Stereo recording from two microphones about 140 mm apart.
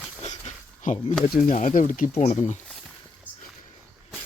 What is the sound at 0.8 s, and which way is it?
Speech, 60° left (ahead or behind).